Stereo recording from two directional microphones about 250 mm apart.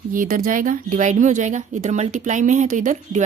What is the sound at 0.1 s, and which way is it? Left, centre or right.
A woman's voice, right.